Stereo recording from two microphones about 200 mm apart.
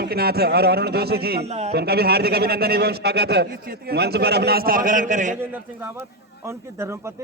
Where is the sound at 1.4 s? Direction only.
35° right (ahead or behind).